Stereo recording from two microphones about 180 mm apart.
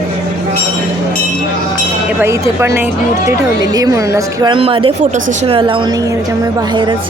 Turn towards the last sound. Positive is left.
turn(degrees=-30)  # may be behind; listen again after turning